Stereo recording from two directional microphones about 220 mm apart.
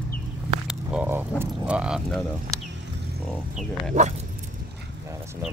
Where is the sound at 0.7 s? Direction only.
5° right (ahead or behind).